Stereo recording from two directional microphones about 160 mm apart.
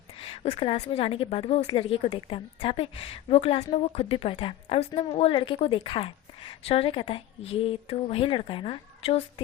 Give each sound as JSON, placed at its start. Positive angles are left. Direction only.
{"t": 0.2, "sound": "a woman's voice", "side_deg": 35}